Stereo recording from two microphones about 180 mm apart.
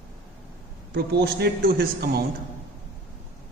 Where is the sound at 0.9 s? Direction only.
65° right (ahead or behind).